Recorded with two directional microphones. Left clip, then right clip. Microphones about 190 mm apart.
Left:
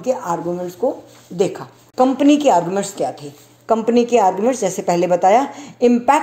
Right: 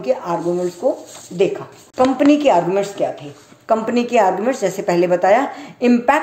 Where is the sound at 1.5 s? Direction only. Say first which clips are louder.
Left 1 dB; 35° left (ahead or behind).